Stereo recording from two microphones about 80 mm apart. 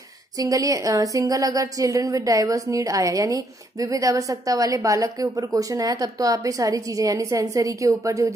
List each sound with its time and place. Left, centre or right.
0.4 s a woman's voice: right